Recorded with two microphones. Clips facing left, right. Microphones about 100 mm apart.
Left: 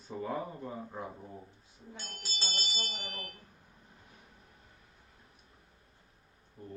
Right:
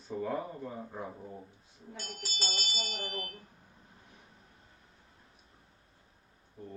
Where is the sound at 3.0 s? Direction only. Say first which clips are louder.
Right 5 dB; 25° right (ahead or behind).